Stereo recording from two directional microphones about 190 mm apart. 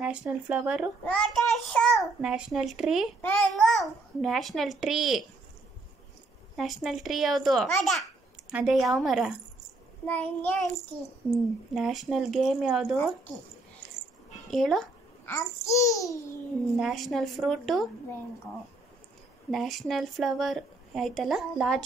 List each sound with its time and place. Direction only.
0.0 s a woman's voice: 5° right (ahead or behind)
6.5 s a child's voice: centre (ahead or behind)
11.7 s a woman's voice: centre (ahead or behind)
14.5 s a sound: centre (ahead or behind)
15.3 s a child's voice: 15° left (ahead or behind)
16.7 s a woman's voice: centre (ahead or behind)
19.5 s a woman's voice: centre (ahead or behind)